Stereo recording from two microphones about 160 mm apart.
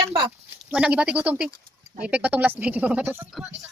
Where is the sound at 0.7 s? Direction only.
5° right (ahead or behind).